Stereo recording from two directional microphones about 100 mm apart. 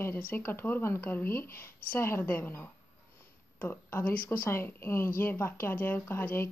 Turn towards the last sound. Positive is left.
turn(degrees=25)  # may be behind; listen again after turning